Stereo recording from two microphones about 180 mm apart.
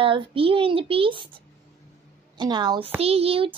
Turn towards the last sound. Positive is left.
turn(degrees=-30)  # may be behind; listen again after turning